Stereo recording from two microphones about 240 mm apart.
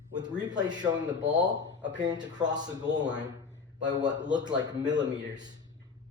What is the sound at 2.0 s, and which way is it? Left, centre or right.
A man's voice, centre.